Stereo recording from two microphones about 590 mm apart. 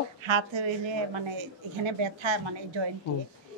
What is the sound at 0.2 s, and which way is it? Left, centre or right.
A woman's voice, right.